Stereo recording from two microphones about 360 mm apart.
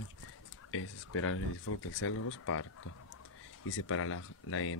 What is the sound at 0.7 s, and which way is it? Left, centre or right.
Speech, left.